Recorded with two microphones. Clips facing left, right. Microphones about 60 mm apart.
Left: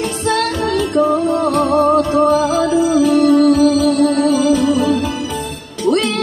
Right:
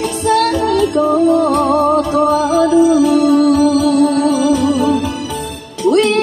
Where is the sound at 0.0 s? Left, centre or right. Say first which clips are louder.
Right 3 dB; left.